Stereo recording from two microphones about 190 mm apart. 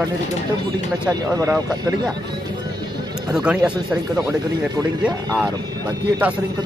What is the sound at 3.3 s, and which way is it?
Speech, 5° right (ahead or behind).